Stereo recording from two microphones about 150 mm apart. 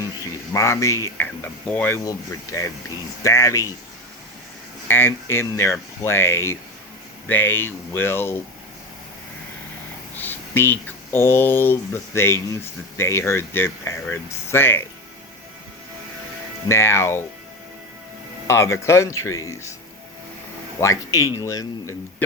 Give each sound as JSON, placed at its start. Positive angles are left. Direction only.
{"t": 0.2, "sound": "speech", "side_deg": 20}
{"t": 4.9, "sound": "speech", "side_deg": 15}
{"t": 10.2, "sound": "speech", "side_deg": 15}
{"t": 16.6, "sound": "speech", "side_deg": 15}
{"t": 18.4, "sound": "speech", "side_deg": 20}
{"t": 20.8, "sound": "speech", "side_deg": 20}